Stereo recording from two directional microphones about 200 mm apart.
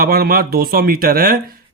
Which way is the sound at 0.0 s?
50° right (ahead or behind).